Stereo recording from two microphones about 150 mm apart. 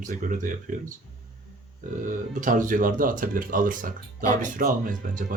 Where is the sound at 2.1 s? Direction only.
60° right (ahead or behind).